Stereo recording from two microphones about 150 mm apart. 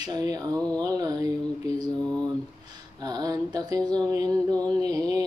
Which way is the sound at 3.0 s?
25° right (ahead or behind).